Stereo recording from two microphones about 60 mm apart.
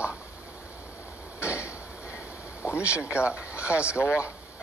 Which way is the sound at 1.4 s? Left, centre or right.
Left.